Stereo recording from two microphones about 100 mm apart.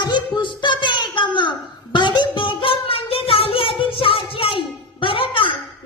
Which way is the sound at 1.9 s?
50° left (ahead or behind).